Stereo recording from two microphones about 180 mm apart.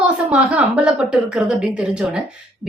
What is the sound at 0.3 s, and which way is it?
A woman's voice, 5° right (ahead or behind).